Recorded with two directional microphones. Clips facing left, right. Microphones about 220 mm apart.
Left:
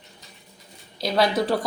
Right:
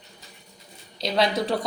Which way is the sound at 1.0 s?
Centre (ahead or behind).